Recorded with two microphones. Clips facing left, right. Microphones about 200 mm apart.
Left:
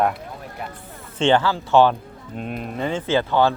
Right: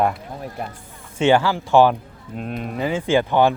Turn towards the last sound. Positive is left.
turn(degrees=-15)  # may be behind; listen again after turning